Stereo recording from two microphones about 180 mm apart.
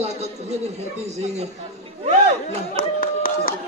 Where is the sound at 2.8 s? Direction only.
50° left (ahead or behind).